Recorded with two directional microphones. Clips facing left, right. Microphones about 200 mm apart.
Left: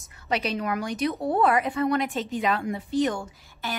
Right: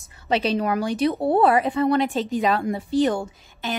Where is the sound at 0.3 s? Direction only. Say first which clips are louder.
Right 5 dB; 30° right (ahead or behind).